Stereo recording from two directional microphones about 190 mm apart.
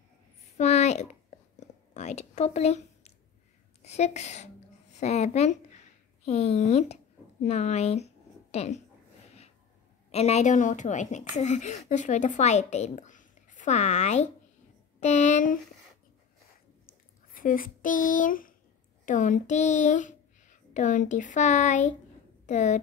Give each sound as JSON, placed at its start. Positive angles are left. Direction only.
{"t": 0.6, "sound": "a sound", "side_deg": 35}
{"t": 3.8, "sound": "speech", "side_deg": 35}
{"t": 10.1, "sound": "speech", "side_deg": 35}
{"t": 17.3, "sound": "a child's voice", "side_deg": 45}